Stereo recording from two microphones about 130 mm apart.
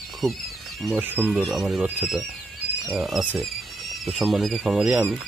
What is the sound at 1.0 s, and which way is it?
Speech, 15° right (ahead or behind).